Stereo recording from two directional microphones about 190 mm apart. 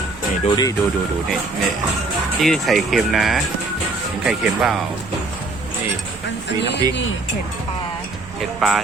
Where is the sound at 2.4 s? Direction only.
Centre (ahead or behind).